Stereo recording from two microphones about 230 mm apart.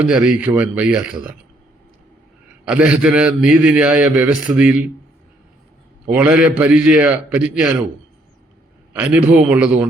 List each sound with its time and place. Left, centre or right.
0.0 s a man's voice: centre
2.6 s a man's voice: centre
6.1 s a man's voice: centre
8.9 s a man's voice: centre